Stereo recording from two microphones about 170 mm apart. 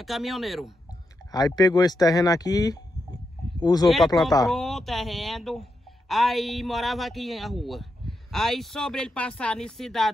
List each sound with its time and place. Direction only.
0.0 s speech: centre (ahead or behind)
1.3 s speech: 25° left (ahead or behind)
3.8 s speech: centre (ahead or behind)